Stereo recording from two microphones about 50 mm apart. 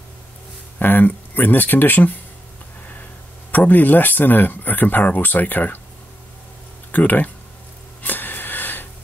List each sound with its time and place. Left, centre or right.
0.7 s speech: left
3.5 s speech: left
6.9 s speech: left
8.0 s a sound: left